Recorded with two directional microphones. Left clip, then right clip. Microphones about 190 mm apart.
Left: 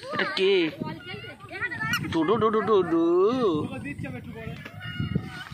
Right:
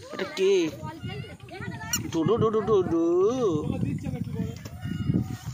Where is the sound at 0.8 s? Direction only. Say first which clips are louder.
Left 3 dB; 15° left (ahead or behind).